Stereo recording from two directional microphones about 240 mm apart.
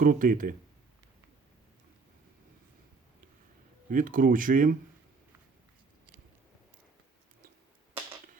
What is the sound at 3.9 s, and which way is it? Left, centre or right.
Speech, right.